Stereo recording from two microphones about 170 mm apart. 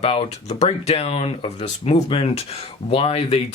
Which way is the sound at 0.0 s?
40° left (ahead or behind).